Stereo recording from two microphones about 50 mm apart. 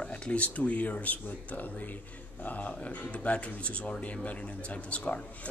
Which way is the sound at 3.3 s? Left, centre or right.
Left.